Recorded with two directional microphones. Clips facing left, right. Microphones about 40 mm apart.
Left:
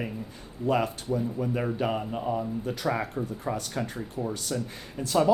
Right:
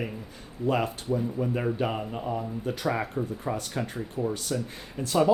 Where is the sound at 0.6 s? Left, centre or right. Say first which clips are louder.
Left 1 dB; right.